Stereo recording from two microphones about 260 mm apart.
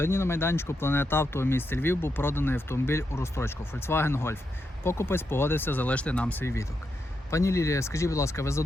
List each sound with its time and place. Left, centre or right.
0.0 s speech: centre